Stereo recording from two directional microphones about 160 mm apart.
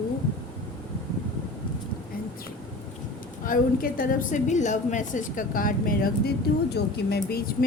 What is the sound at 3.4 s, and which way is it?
A woman's voice, 60° left (ahead or behind).